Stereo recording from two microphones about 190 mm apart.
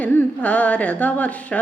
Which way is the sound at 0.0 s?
10° left (ahead or behind).